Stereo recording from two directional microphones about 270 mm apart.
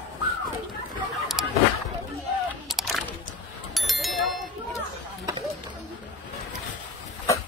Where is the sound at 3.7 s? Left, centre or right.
Centre.